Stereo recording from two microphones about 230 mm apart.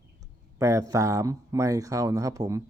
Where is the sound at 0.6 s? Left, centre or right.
Centre.